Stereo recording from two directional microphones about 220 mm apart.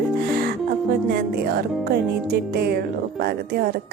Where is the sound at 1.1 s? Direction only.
45° right (ahead or behind).